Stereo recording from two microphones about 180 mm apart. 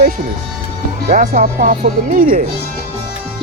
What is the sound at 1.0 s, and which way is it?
Speech, 45° right (ahead or behind).